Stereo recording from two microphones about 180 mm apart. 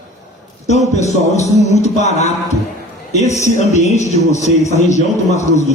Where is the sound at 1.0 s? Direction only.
40° left (ahead or behind).